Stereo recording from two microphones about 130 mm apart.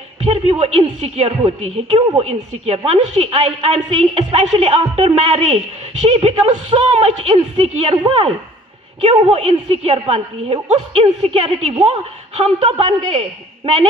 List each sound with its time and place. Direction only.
0.2 s a woman's voice: 55° right (ahead or behind)
7.3 s a woman's voice: 40° right (ahead or behind)
8.1 s a woman's voice: 50° right (ahead or behind)